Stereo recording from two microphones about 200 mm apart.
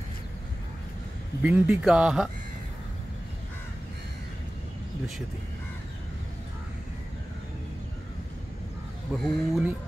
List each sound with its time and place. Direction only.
1.4 s speech: 5° right (ahead or behind)
9.1 s speech: centre (ahead or behind)